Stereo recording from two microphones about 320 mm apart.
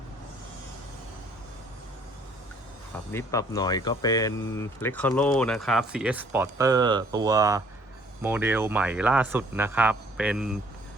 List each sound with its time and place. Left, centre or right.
3.1 s speech: centre